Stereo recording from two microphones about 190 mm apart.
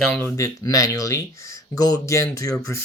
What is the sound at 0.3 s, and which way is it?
Speech, 15° left (ahead or behind).